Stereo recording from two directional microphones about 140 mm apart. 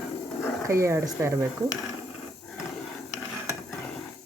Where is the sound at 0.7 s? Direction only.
20° right (ahead or behind).